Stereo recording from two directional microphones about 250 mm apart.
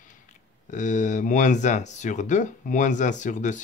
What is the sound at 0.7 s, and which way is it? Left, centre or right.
Speech, left.